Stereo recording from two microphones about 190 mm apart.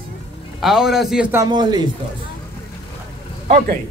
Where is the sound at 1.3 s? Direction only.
20° right (ahead or behind).